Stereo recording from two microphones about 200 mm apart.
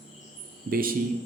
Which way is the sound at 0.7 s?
45° right (ahead or behind).